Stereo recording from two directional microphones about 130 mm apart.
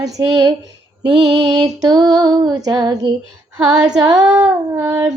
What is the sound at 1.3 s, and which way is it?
Female singing, 30° right (ahead or behind).